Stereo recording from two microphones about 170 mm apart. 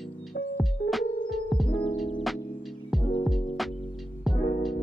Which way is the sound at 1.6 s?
30° left (ahead or behind).